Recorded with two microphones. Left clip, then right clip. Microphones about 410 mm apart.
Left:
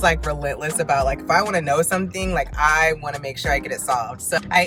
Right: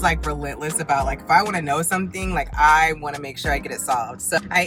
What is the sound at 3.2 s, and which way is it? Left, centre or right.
Speech, centre.